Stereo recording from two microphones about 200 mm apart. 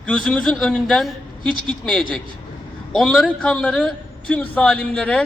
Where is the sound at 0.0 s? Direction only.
5° left (ahead or behind).